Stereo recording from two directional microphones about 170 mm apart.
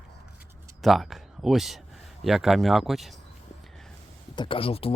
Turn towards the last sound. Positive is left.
turn(degrees=35)  # may be behind; listen again after turning